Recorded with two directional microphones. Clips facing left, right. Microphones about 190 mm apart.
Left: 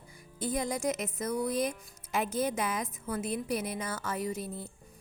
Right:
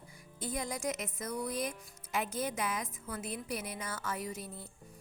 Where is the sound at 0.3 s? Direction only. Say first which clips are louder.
Left 6 dB; 25° left (ahead or behind).